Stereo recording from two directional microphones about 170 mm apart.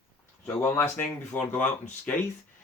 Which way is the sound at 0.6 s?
15° left (ahead or behind).